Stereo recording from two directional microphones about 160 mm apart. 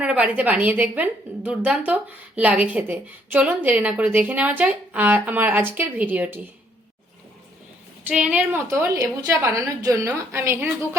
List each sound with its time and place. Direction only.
0.0 s a woman's voice: 10° right (ahead or behind)
8.0 s a woman's voice: 10° right (ahead or behind)